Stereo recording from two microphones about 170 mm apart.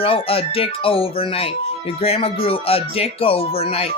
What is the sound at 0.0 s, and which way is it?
Music, 35° left (ahead or behind).